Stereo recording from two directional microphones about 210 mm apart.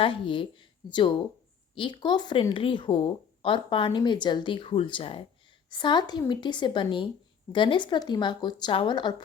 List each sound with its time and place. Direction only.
0.0 s speech: 25° left (ahead or behind)